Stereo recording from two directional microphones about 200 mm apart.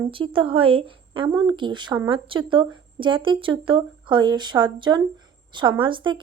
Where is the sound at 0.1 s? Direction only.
25° right (ahead or behind).